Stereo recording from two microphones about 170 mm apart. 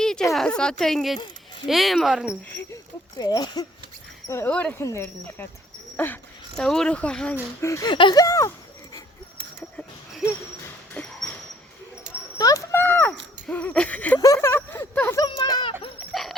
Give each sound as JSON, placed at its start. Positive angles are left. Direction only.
{"t": 0.0, "sound": "a sound", "side_deg": 5}
{"t": 0.3, "sound": "speech", "side_deg": 5}
{"t": 3.2, "sound": "speech", "side_deg": 20}
{"t": 4.3, "sound": "speech", "side_deg": 10}
{"t": 7.6, "sound": "speech", "side_deg": 20}
{"t": 9.6, "sound": "a sound", "side_deg": 10}
{"t": 12.4, "sound": "a sound", "side_deg": 20}
{"t": 13.5, "sound": "speech", "side_deg": 10}
{"t": 14.2, "sound": "speech", "side_deg": 20}
{"t": 15.3, "sound": "speech", "side_deg": 25}